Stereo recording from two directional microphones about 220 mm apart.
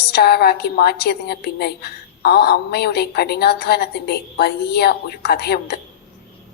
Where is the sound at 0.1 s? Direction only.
45° left (ahead or behind).